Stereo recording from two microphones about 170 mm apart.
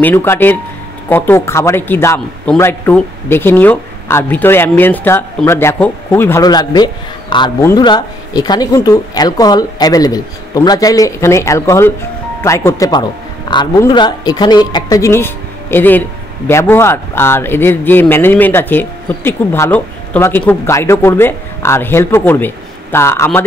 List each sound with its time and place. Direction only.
0.0 s speech: 15° left (ahead or behind)